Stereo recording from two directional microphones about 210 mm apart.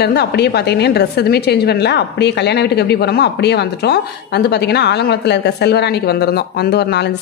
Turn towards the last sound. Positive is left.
turn(degrees=50)  # may be behind; listen again after turning